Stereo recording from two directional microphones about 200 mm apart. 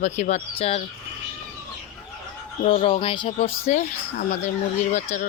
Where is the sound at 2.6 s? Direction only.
30° left (ahead or behind).